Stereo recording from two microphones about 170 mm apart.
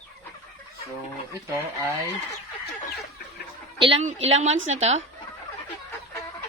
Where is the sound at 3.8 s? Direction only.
35° right (ahead or behind).